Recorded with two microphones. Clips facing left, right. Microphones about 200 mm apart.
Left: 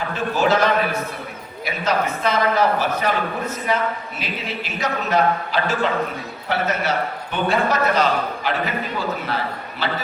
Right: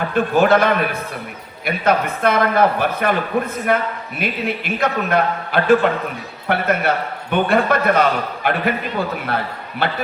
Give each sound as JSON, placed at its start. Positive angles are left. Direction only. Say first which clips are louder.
{"t": 0.1, "sound": "a man's voice", "louder": "right 5 dB", "side_deg": -55}